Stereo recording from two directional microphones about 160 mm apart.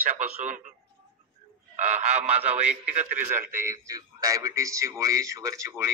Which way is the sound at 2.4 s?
10° right (ahead or behind).